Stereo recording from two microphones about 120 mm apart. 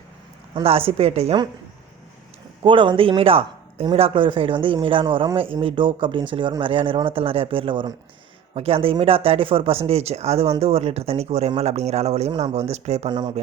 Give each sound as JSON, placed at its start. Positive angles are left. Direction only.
{"t": 0.5, "sound": "speech", "side_deg": -50}
{"t": 2.6, "sound": "speech", "side_deg": -45}
{"t": 13.1, "sound": "speech", "side_deg": -35}